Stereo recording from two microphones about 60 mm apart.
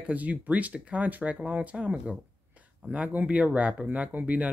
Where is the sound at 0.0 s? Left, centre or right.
Right.